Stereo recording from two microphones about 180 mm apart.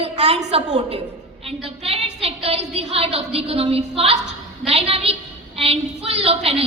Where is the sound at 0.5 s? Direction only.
35° right (ahead or behind).